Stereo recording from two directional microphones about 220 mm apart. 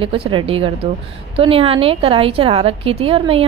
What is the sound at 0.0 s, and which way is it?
A woman's voice, 25° right (ahead or behind).